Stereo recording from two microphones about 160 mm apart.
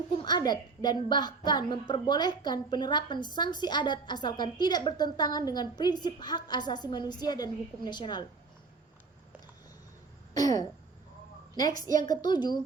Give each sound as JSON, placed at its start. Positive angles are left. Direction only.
{"t": 0.2, "sound": "a woman's voice", "side_deg": 25}
{"t": 10.3, "sound": "throat clearing", "side_deg": 25}
{"t": 12.0, "sound": "a woman's voice", "side_deg": 25}